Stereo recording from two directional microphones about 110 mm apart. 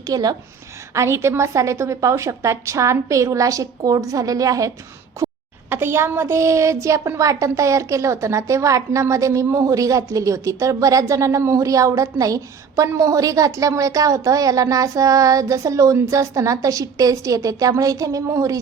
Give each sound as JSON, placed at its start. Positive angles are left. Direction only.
{"t": 0.1, "sound": "a woman's voice", "side_deg": -35}
{"t": 0.9, "sound": "speech", "side_deg": -25}